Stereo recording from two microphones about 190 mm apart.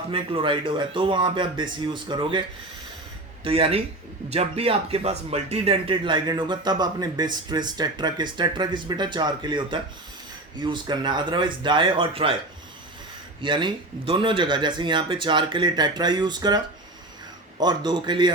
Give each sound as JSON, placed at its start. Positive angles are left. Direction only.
{"t": 0.1, "sound": "speech", "side_deg": -25}
{"t": 3.4, "sound": "speech", "side_deg": -30}
{"t": 13.4, "sound": "speech", "side_deg": -25}
{"t": 17.6, "sound": "speech", "side_deg": -20}